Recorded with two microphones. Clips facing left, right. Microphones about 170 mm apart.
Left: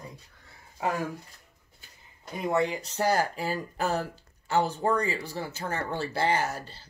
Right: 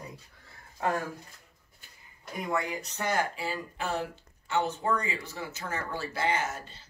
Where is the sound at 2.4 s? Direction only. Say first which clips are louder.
Left 6 dB; 25° left (ahead or behind).